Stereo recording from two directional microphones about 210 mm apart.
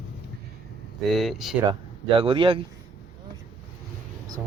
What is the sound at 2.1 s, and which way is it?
Speech, 25° right (ahead or behind).